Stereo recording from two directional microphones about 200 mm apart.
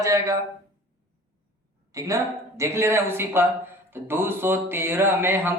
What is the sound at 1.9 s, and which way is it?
Speech, 15° right (ahead or behind).